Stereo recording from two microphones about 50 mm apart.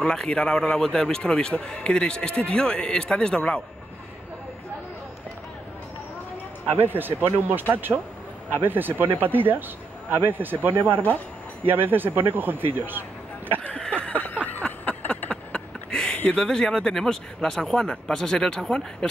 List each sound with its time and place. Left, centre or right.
0.0 s speech: centre
6.7 s a man's voice: right
11.0 s speech: left
11.6 s a man's voice: right
13.7 s a sound: left
15.9 s a sound: centre
16.3 s speech: centre